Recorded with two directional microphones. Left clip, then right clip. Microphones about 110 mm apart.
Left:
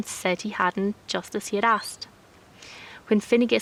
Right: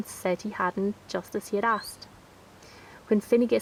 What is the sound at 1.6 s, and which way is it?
Speech, 55° left (ahead or behind).